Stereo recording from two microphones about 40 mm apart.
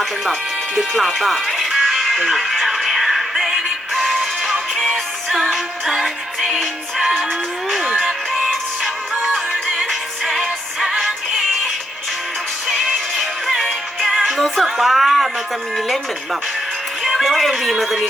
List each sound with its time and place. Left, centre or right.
0.8 s music: centre
7.7 s music: centre
8.8 s music: centre
12.8 s music: centre
14.3 s a woman's voice: centre
17.0 s speech: centre